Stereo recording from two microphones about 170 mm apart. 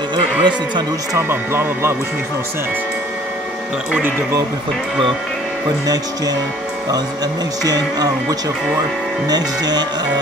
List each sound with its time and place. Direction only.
0.1 s speech: 25° right (ahead or behind)
1.1 s speech: 15° right (ahead or behind)
7.6 s music: 20° right (ahead or behind)